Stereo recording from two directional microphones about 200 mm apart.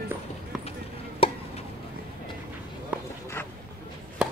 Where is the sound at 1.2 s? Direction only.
25° left (ahead or behind).